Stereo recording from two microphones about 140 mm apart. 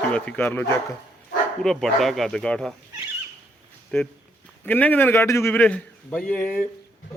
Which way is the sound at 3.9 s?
5° left (ahead or behind).